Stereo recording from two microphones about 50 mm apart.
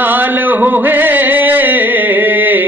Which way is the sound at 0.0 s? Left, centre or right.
Right.